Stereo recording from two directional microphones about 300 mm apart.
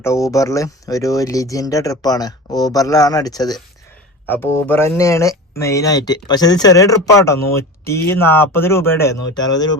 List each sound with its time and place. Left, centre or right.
0.0 s speech: centre